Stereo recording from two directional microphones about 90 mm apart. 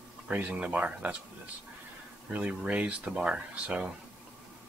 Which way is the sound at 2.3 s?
15° right (ahead or behind).